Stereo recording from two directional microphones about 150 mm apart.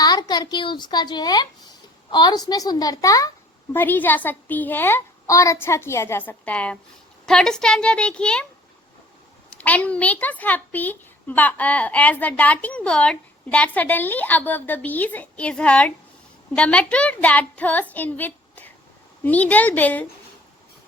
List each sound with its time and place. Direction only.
0.0 s a woman's voice: 25° left (ahead or behind)
3.7 s a child's voice: 15° left (ahead or behind)
9.6 s a child's voice: 10° left (ahead or behind)